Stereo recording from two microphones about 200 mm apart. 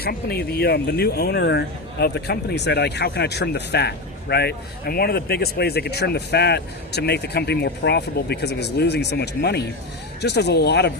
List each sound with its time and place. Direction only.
0.0 s speech: 50° left (ahead or behind)